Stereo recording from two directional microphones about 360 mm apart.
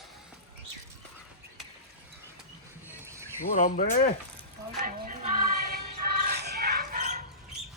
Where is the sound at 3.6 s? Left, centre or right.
Left.